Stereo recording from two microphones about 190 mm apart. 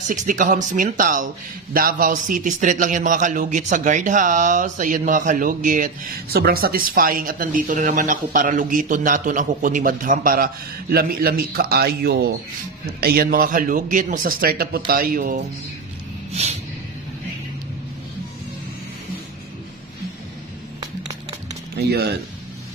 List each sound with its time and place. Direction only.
0.1 s speech: 45° right (ahead or behind)
21.7 s speech: 60° right (ahead or behind)